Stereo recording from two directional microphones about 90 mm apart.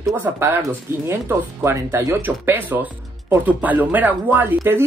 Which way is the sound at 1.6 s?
30° right (ahead or behind).